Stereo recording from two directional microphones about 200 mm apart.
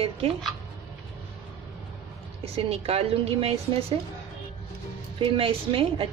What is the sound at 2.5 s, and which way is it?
A woman's voice, 30° right (ahead or behind).